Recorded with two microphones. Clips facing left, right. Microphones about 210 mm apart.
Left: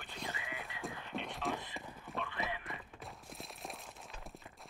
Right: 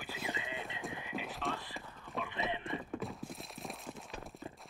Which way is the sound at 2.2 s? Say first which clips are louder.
Right 4 dB; 20° right (ahead or behind).